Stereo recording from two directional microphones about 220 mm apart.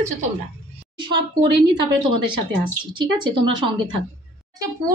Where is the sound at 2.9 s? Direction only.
20° right (ahead or behind).